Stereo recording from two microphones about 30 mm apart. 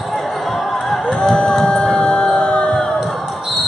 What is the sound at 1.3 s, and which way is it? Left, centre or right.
Music, centre.